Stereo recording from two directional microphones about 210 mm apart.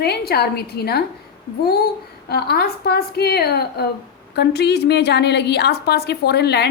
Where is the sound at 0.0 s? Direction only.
50° left (ahead or behind).